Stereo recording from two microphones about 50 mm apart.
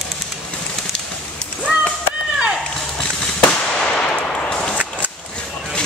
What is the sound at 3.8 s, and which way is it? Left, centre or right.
Gunshot, centre.